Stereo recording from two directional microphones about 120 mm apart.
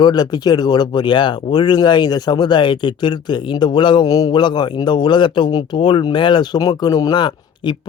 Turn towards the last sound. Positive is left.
turn(degrees=40)  # may be behind; listen again after turning